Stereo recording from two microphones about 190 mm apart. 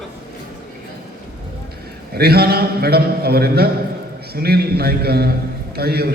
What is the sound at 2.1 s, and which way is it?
A man's voice, 55° right (ahead or behind).